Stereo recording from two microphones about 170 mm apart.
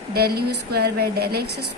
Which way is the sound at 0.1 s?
65° right (ahead or behind).